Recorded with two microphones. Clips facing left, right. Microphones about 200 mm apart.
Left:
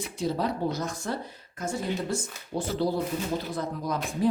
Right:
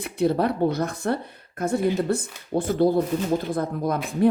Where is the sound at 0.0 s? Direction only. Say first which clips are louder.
Right 7 dB; 60° right (ahead or behind).